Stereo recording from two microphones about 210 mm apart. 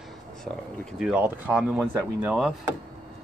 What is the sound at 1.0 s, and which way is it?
Speech, 5° right (ahead or behind).